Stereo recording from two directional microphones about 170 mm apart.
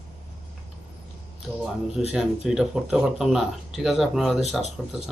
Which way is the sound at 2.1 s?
5° right (ahead or behind).